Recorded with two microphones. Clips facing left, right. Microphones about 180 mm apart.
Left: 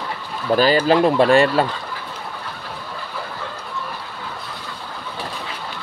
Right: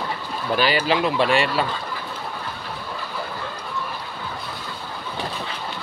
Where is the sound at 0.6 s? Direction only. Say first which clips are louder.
Left 6 dB; 40° left (ahead or behind).